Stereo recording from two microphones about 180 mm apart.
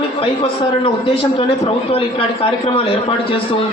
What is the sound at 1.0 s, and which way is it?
A man's voice, 30° left (ahead or behind).